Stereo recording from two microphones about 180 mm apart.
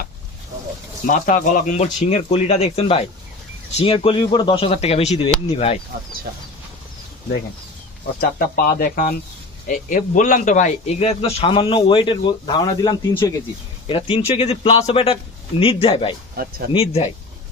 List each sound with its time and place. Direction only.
1.0 s speech: 45° left (ahead or behind)
8.2 s speech: 55° left (ahead or behind); by 16.1 s 30° left (ahead or behind)
16.4 s speech: 60° right (ahead or behind)
16.7 s speech: 35° left (ahead or behind)